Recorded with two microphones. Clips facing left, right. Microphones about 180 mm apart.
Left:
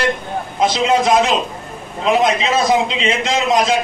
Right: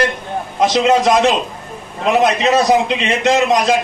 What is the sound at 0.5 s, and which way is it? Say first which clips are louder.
Speech: right 2 dB; 70° right (ahead or behind).